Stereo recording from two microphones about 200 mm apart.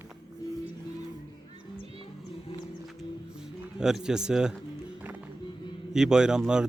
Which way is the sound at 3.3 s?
5° right (ahead or behind).